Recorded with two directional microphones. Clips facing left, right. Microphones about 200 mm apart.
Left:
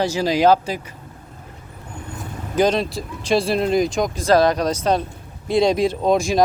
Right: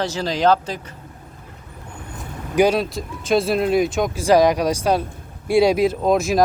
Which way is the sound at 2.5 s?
10° right (ahead or behind).